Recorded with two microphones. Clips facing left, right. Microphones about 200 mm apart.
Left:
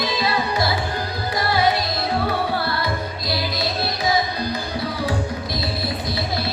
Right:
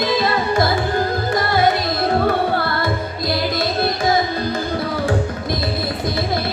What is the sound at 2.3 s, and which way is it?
Carnatic music, 50° right (ahead or behind).